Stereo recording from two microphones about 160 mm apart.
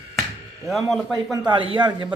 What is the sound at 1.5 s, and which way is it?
Speech, 30° right (ahead or behind).